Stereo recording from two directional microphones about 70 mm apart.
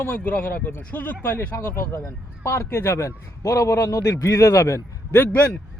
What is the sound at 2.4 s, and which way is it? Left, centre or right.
A man's voice, left.